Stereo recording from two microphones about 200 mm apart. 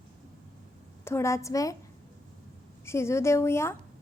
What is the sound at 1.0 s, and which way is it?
Speech, 15° left (ahead or behind).